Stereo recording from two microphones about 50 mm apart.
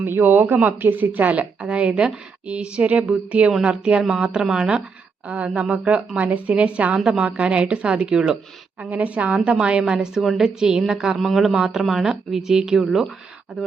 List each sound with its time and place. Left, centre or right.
0.0 s a woman's voice: right; by 8.4 s centre
8.8 s a woman's voice: right
10.2 s speech: centre
11.2 s speech: centre